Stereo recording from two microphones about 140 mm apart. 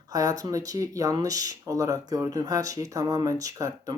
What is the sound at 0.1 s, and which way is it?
Speech, 25° right (ahead or behind).